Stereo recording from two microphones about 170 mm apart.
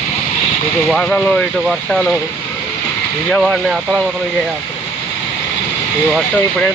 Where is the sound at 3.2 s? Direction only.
5° left (ahead or behind).